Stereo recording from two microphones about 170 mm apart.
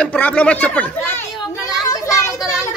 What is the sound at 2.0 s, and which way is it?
Children playing, 20° left (ahead or behind).